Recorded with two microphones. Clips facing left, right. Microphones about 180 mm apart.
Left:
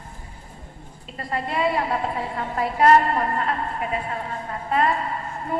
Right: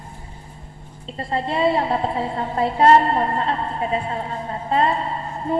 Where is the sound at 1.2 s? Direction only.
25° right (ahead or behind).